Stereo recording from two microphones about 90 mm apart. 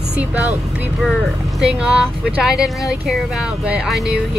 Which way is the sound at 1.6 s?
10° right (ahead or behind).